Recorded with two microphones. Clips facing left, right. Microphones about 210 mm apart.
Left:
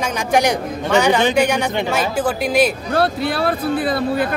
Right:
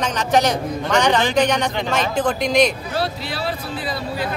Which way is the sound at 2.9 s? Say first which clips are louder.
Left 6 dB; 55° left (ahead or behind).